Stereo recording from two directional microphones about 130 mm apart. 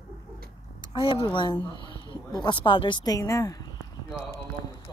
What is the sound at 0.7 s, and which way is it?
A woman's voice, 40° left (ahead or behind).